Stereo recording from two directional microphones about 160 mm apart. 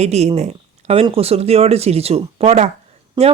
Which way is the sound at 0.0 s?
40° right (ahead or behind).